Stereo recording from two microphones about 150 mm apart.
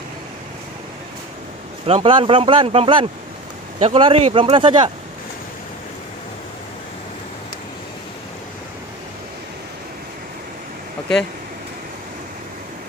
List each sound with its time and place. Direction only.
1.9 s speech: 35° right (ahead or behind)